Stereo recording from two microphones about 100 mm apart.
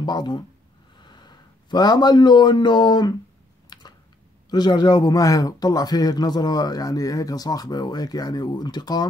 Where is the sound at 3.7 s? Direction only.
50° left (ahead or behind).